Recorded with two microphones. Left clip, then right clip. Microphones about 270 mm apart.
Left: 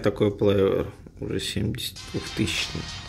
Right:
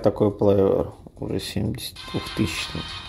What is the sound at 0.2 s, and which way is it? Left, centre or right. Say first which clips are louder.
Speech: even; centre.